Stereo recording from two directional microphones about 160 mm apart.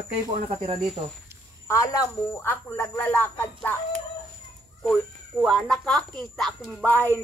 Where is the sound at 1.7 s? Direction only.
20° left (ahead or behind).